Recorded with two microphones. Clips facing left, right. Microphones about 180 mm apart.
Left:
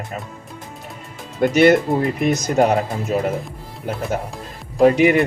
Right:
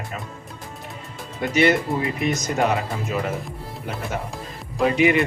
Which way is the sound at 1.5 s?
50° left (ahead or behind).